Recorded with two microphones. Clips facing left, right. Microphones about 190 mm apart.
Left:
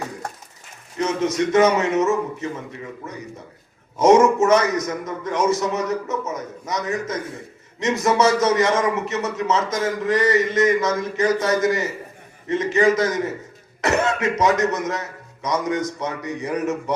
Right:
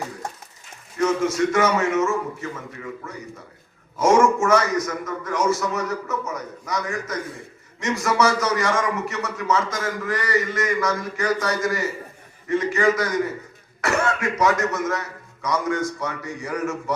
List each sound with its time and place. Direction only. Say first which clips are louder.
0.9 s a man's voice: even; 20° left (ahead or behind)
3.9 s a man's voice: left 3 dB; 20° left (ahead or behind)